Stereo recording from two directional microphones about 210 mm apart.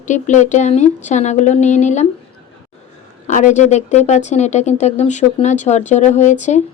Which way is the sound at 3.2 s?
35° left (ahead or behind).